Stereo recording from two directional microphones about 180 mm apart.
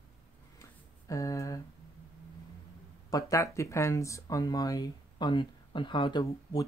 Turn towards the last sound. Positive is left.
turn(degrees=25)  # may be behind; listen again after turning